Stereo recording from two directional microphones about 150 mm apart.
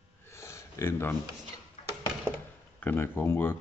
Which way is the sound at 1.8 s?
45° left (ahead or behind).